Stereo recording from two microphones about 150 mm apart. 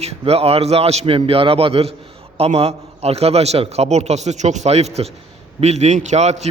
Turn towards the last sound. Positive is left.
turn(degrees=-50)  # may be behind; listen again after turning